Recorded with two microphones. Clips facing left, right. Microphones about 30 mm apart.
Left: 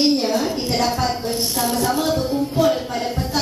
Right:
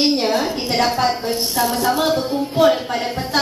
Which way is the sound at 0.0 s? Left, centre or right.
Right.